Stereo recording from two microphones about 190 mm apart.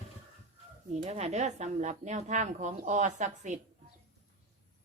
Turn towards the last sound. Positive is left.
turn(degrees=-40)  # may be behind; listen again after turning